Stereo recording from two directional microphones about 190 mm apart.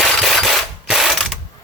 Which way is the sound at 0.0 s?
Centre (ahead or behind).